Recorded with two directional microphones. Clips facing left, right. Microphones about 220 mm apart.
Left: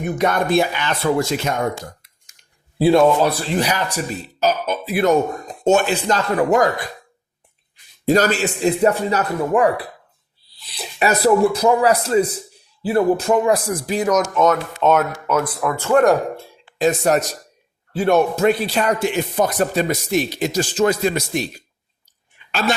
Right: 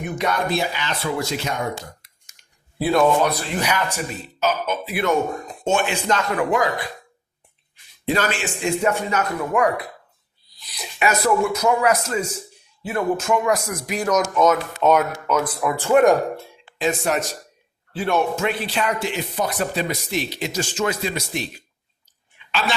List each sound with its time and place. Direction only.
0.2 s speech: 50° left (ahead or behind)
2.7 s speech: 30° left (ahead or behind)
8.0 s speech: 40° left (ahead or behind)
14.0 s speech: centre (ahead or behind)
16.7 s speech: 40° left (ahead or behind)